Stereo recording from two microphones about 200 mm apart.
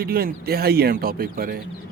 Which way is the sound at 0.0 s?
50° right (ahead or behind).